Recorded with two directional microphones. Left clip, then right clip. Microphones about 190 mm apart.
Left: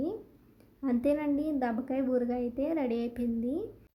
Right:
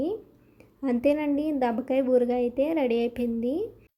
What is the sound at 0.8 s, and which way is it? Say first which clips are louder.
A woman's voice: right 5 dB; 20° right (ahead or behind).